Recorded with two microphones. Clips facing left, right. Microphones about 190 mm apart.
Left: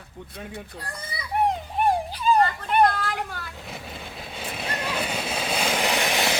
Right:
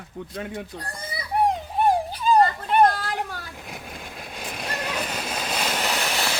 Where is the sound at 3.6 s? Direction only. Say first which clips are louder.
Even; centre (ahead or behind).